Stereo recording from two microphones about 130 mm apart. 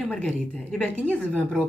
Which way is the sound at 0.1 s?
5° left (ahead or behind).